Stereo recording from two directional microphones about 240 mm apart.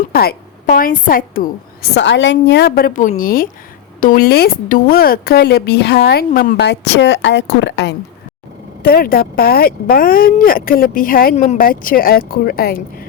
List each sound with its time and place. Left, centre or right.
0.1 s speech: left